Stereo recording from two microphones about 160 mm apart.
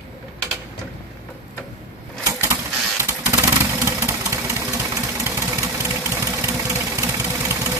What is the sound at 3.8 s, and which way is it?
Engine, 20° right (ahead or behind).